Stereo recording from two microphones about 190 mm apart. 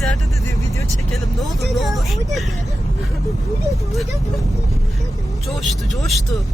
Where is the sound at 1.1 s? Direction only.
Centre (ahead or behind).